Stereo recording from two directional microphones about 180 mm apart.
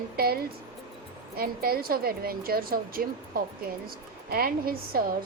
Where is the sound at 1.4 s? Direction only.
55° right (ahead or behind).